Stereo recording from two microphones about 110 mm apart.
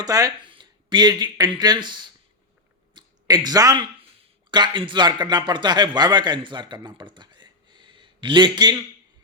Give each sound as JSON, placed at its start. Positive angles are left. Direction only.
{"t": 0.0, "sound": "speech", "side_deg": -35}
{"t": 0.4, "sound": "speech", "side_deg": -45}
{"t": 2.9, "sound": "a sound", "side_deg": -40}
{"t": 4.5, "sound": "a man's voice", "side_deg": -45}